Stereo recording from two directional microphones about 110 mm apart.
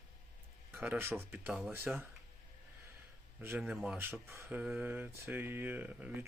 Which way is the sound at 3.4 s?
15° right (ahead or behind).